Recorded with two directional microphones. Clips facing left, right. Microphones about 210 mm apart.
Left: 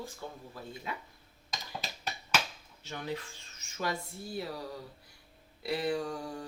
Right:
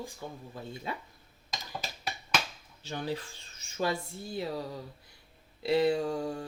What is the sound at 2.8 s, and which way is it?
Speech, 30° right (ahead or behind).